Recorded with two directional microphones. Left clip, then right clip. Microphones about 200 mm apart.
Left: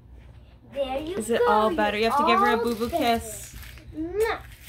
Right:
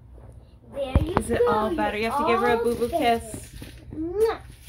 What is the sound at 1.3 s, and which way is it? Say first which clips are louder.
A woman's voice: left 3 dB; 25° left (ahead or behind).